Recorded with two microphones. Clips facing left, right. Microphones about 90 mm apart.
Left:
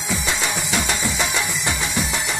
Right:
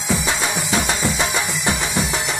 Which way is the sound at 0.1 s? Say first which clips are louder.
Right 3 dB; 15° right (ahead or behind).